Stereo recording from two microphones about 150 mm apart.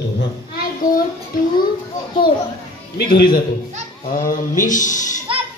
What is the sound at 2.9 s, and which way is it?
A man's voice, 75° left (ahead or behind).